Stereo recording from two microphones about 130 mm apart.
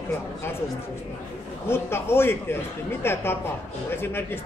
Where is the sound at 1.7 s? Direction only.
20° left (ahead or behind).